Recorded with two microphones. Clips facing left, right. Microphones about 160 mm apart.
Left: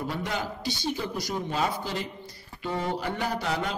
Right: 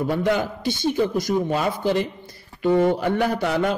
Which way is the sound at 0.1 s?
60° right (ahead or behind).